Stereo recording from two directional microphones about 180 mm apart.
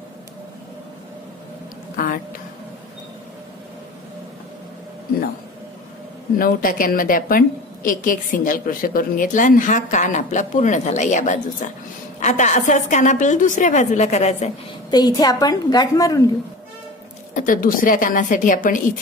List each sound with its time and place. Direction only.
6.3 s a woman's voice: 50° left (ahead or behind)
14.9 s a woman's voice: 20° left (ahead or behind)
17.3 s a woman's voice: 50° left (ahead or behind)